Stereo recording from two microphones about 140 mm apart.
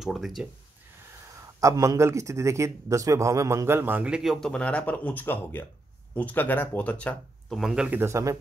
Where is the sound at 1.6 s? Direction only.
25° right (ahead or behind).